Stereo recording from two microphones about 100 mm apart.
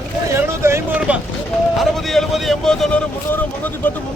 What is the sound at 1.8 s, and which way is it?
Speech, centre (ahead or behind).